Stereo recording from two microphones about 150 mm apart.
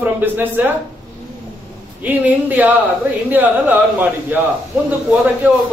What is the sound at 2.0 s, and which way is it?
A man's voice, 10° right (ahead or behind).